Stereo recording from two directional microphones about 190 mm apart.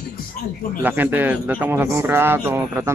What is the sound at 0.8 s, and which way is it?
Speech, 10° right (ahead or behind).